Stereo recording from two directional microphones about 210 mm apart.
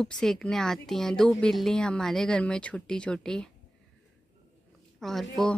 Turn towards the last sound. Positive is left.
turn(degrees=0)  # may be behind; listen again after turning